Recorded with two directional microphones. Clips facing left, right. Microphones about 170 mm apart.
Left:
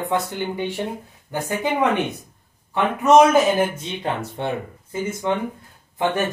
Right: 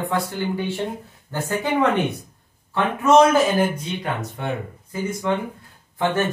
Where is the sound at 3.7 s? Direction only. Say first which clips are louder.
Left 1 dB; 25° left (ahead or behind).